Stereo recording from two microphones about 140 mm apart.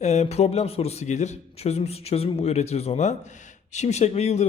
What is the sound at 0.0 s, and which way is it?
Speech, 55° left (ahead or behind).